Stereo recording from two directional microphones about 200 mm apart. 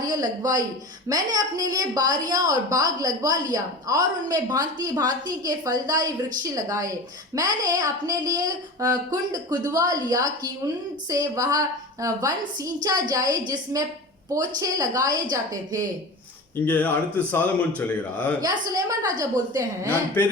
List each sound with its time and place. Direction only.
0.1 s a woman's voice: 20° right (ahead or behind)
16.6 s speech: 10° left (ahead or behind)
18.4 s a woman's voice: 15° right (ahead or behind)